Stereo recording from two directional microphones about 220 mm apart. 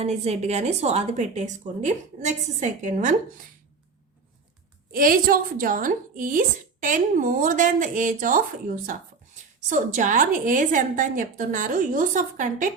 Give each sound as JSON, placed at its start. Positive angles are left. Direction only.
{"t": 0.0, "sound": "a woman's voice", "side_deg": -30}
{"t": 4.9, "sound": "a woman's voice", "side_deg": -40}